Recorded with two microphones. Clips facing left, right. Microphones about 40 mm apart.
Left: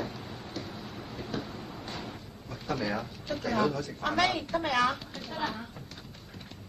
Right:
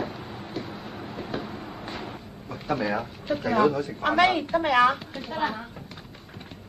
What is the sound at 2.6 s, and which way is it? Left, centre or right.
A woman's voice, right.